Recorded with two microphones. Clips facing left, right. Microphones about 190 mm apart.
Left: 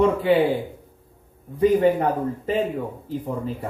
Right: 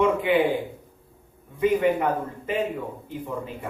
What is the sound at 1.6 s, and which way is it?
Speech, 35° left (ahead or behind).